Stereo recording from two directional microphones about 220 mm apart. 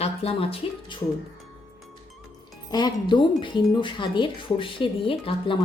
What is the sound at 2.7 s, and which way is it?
Speech, 20° left (ahead or behind).